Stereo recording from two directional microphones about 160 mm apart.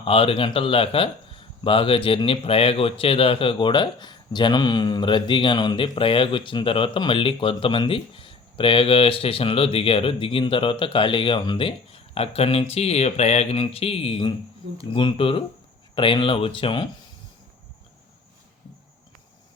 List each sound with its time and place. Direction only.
0.0 s speech: 35° left (ahead or behind)